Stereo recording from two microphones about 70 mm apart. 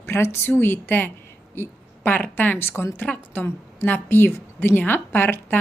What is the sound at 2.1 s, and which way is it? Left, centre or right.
A woman's voice, left.